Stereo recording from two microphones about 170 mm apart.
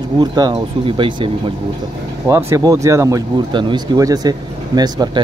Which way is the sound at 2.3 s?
15° right (ahead or behind).